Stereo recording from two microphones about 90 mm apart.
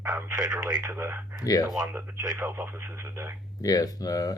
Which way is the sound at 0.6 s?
45° right (ahead or behind).